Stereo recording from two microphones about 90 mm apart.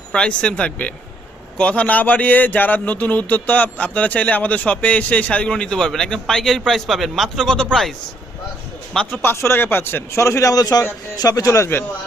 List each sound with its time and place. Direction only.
0.1 s a man's voice: 10° left (ahead or behind)
9.2 s a man's voice: 30° left (ahead or behind)